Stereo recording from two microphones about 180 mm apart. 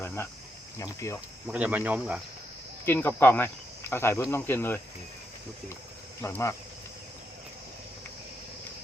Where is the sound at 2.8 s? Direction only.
10° left (ahead or behind).